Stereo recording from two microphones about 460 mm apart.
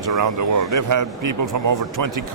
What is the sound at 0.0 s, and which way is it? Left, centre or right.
Speech, right.